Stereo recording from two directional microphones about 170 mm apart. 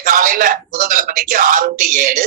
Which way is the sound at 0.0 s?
50° right (ahead or behind).